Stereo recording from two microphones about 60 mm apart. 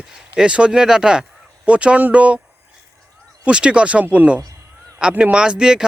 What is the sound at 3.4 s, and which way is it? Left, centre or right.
Speech, centre.